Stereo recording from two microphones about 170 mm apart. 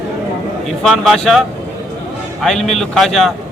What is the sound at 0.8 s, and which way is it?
Speech, centre (ahead or behind).